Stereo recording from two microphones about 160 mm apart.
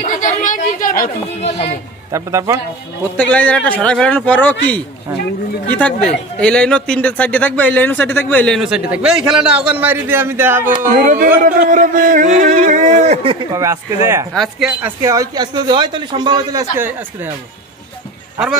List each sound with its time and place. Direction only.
0.0 s a sound: 55° left (ahead or behind)
2.0 s a man's voice: 20° right (ahead or behind)
3.2 s speech: 10° left (ahead or behind)
8.5 s a man's voice: 5° right (ahead or behind)
10.9 s speech: 55° right (ahead or behind); by 13.5 s 35° right (ahead or behind)
13.5 s a man's voice: 20° right (ahead or behind)
14.3 s speech: centre (ahead or behind)
15.0 s a man's voice: 20° right (ahead or behind)
16.7 s a man's voice: 15° right (ahead or behind)